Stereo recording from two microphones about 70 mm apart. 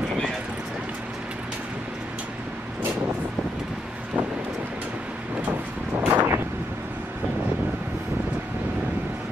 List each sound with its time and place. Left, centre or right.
6.0 s vehicle: right